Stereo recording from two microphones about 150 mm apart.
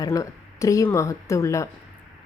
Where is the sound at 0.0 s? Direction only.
20° left (ahead or behind).